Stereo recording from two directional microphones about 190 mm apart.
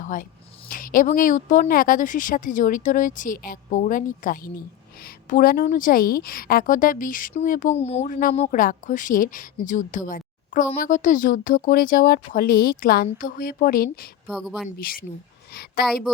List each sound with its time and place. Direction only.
0.0 s a woman's voice: 45° left (ahead or behind)
14.3 s speech: centre (ahead or behind)
14.8 s a woman's voice: 50° left (ahead or behind)